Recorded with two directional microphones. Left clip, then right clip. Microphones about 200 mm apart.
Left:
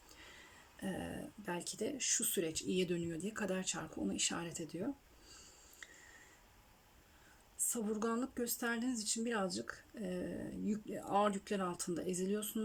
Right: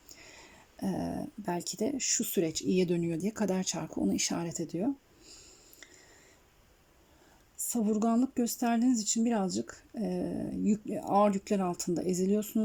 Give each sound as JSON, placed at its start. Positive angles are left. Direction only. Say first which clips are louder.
{"t": 0.8, "sound": "speech", "louder": "right 8 dB", "side_deg": -30}
{"t": 7.7, "sound": "speech", "louder": "right 9 dB", "side_deg": -30}